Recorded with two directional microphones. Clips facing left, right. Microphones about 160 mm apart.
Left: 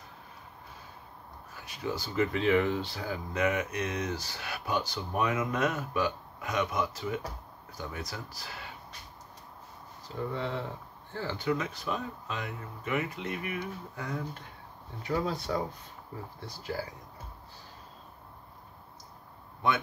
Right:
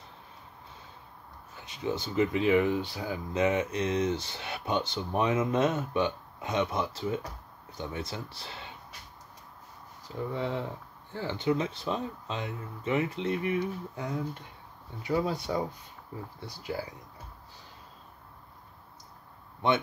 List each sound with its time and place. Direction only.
1.5 s speech: 20° right (ahead or behind)
10.3 s speech: 15° right (ahead or behind)
15.0 s speech: 10° right (ahead or behind)
19.6 s speech: 25° right (ahead or behind)